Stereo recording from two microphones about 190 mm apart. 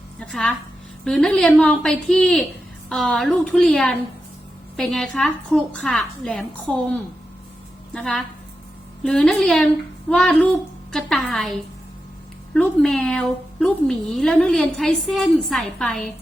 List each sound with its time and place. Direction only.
0.2 s a woman's voice: 5° left (ahead or behind)
7.9 s a woman's voice: 5° left (ahead or behind)
12.5 s a woman's voice: 5° left (ahead or behind)